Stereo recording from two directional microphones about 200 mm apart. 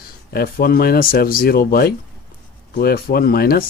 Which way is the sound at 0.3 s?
50° left (ahead or behind).